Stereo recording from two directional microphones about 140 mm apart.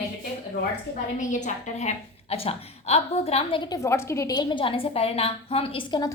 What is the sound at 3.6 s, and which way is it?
A woman's voice, 25° left (ahead or behind).